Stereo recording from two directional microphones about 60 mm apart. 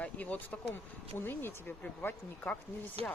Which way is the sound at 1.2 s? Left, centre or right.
Left.